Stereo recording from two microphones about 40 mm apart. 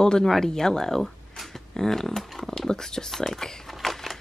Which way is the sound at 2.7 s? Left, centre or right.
Centre.